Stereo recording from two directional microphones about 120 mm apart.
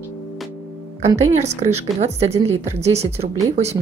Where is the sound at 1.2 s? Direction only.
65° right (ahead or behind).